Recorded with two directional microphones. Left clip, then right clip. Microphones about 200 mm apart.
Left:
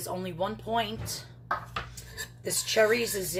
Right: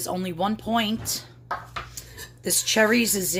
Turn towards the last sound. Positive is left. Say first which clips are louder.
# right 4 dB
turn(degrees=-55)  # may be behind; listen again after turning